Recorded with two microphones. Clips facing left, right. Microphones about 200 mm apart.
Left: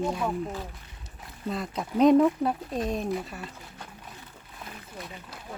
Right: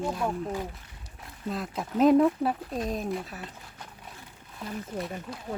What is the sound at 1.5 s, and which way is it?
Speech, centre (ahead or behind).